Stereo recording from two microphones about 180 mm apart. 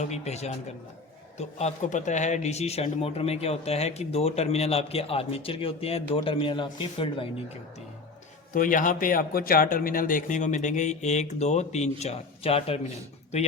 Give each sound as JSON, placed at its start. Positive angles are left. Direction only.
{"t": 0.0, "sound": "a man's voice", "side_deg": 35}
{"t": 8.5, "sound": "speech", "side_deg": 50}